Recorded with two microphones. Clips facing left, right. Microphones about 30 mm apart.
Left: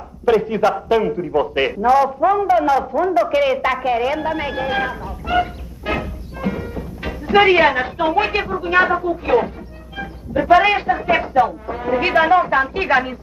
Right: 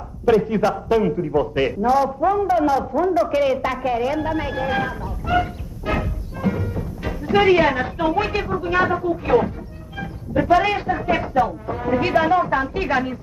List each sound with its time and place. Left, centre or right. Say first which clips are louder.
0.3 s a man's voice: left 2 dB; centre
5.4 s music: left 3 dB; centre
7.1 s a man's voice: left 3 dB; centre
9.9 s a sound: left 1 dB; centre
10.5 s a man's voice: left 5 dB; left